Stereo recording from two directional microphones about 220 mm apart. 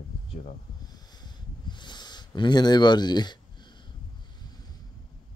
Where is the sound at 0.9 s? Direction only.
20° left (ahead or behind).